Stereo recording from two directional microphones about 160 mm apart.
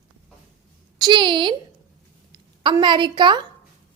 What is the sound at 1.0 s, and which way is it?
Speech, 30° right (ahead or behind).